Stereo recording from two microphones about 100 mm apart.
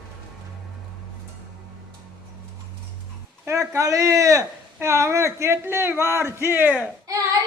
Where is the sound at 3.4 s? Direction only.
30° right (ahead or behind).